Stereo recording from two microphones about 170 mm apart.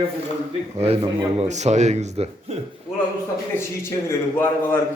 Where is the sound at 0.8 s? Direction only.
35° right (ahead or behind).